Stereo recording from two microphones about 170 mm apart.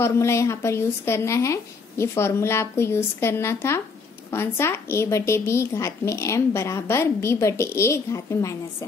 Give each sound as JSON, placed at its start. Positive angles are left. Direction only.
{"t": 0.0, "sound": "a woman's voice", "side_deg": 15}